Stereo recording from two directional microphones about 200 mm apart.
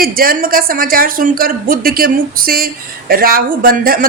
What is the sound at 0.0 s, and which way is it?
A woman's voice, 45° right (ahead or behind).